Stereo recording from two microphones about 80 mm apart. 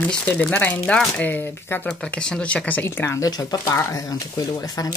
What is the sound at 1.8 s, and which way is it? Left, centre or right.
Speech, centre.